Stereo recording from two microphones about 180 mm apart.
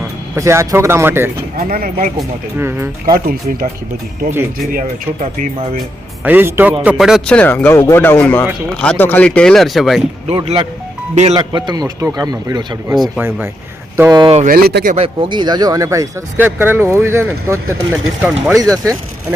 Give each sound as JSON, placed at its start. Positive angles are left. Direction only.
{"t": 0.3, "sound": "speech", "side_deg": -15}
{"t": 1.5, "sound": "speech", "side_deg": -55}
{"t": 2.6, "sound": "speech", "side_deg": -15}
{"t": 3.2, "sound": "speech", "side_deg": -55}
{"t": 6.2, "sound": "speech", "side_deg": -10}
{"t": 10.2, "sound": "speech", "side_deg": -35}
{"t": 11.3, "sound": "a man's voice", "side_deg": -25}
{"t": 12.9, "sound": "speech", "side_deg": 0}
{"t": 13.9, "sound": "speech", "side_deg": -20}
{"t": 14.3, "sound": "speech", "side_deg": -50}
{"t": 14.9, "sound": "speech", "side_deg": -30}